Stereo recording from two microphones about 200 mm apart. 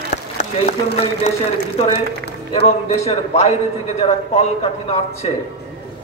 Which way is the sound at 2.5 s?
30° left (ahead or behind).